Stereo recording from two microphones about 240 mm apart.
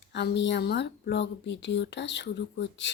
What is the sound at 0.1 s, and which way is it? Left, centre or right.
Speech, left.